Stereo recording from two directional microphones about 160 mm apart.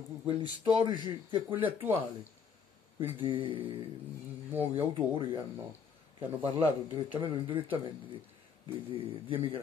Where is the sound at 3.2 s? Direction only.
35° right (ahead or behind).